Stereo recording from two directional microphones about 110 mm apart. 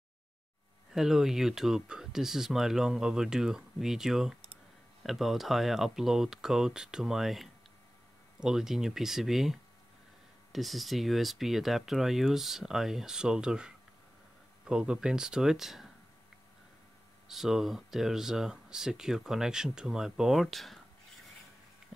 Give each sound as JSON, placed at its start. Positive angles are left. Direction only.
{"t": 0.9, "sound": "speech", "side_deg": -5}
{"t": 17.3, "sound": "speech", "side_deg": -5}